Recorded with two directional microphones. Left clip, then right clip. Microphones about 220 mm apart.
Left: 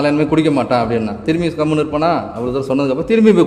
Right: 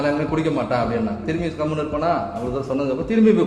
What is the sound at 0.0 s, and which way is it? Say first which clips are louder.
A man's voice: left 7 dB; 50° left (ahead or behind).